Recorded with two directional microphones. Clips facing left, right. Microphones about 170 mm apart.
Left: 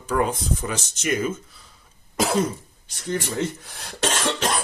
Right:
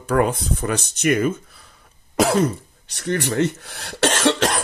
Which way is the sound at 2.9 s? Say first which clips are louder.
Right 4 dB; 70° right (ahead or behind).